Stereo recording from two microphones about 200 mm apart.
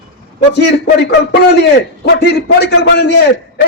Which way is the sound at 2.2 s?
55° left (ahead or behind).